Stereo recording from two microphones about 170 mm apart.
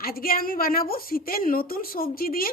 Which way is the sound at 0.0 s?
60° left (ahead or behind).